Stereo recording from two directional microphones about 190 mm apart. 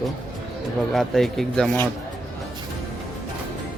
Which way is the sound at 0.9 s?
Centre (ahead or behind).